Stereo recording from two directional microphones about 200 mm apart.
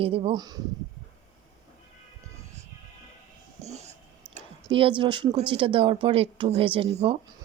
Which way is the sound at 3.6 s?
35° right (ahead or behind).